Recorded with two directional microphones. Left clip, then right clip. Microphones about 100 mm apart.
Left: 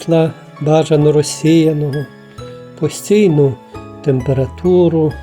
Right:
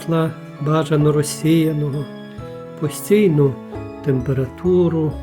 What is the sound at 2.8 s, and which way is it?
Speech, 25° left (ahead or behind).